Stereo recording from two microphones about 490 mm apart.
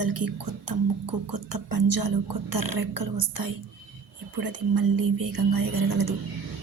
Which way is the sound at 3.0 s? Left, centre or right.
Right.